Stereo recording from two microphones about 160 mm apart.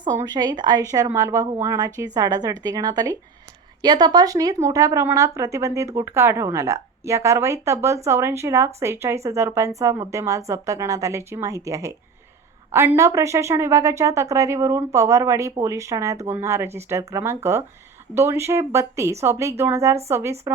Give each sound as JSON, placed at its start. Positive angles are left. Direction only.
{"t": 0.2, "sound": "speech", "side_deg": -25}